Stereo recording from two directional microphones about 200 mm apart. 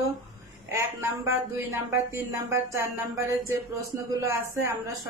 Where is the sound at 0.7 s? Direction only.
10° right (ahead or behind).